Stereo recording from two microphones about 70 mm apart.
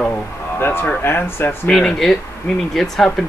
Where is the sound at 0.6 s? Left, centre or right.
Left.